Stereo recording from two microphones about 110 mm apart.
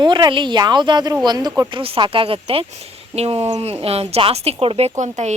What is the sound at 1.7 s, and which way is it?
Speech, 50° right (ahead or behind).